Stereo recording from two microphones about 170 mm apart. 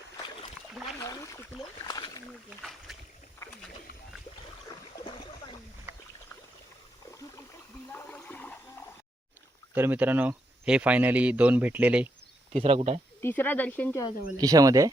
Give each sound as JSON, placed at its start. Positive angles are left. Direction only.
{"t": 0.2, "sound": "splash", "side_deg": 25}
{"t": 0.7, "sound": "rowboat", "side_deg": 0}
{"t": 0.9, "sound": "a sound", "side_deg": 20}
{"t": 1.8, "sound": "speech", "side_deg": 25}
{"t": 2.6, "sound": "speech", "side_deg": 0}
{"t": 4.7, "sound": "a sound", "side_deg": 25}
{"t": 7.1, "sound": "a sound", "side_deg": 20}
{"t": 9.7, "sound": "speech", "side_deg": -10}
{"t": 12.5, "sound": "speech", "side_deg": -35}
{"t": 13.2, "sound": "speech", "side_deg": 10}
{"t": 14.3, "sound": "speech", "side_deg": -20}